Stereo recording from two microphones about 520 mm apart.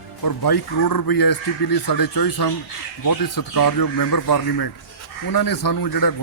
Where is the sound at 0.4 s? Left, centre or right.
Left.